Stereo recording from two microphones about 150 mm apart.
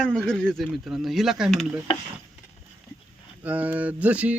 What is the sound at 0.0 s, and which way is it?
Speech, 5° left (ahead or behind).